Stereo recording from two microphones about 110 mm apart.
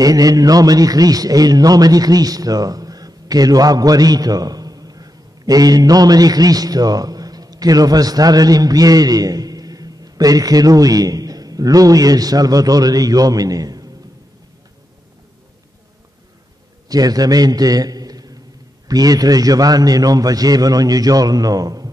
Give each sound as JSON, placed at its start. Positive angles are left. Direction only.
{"t": 0.0, "sound": "a man's voice", "side_deg": -35}
{"t": 16.9, "sound": "a man's voice", "side_deg": -35}